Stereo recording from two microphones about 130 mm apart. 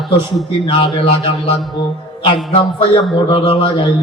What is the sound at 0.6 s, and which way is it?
A man's voice, 45° left (ahead or behind).